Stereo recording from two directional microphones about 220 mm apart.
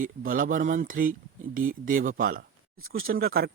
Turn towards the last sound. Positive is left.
turn(degrees=-45)  # may be behind; listen again after turning